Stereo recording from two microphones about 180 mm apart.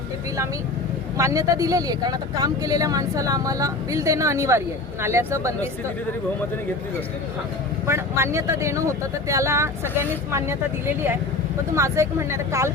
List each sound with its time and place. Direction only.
1.1 s speech: 15° right (ahead or behind)
7.9 s speech: 15° right (ahead or behind)
11.7 s speech: 15° right (ahead or behind)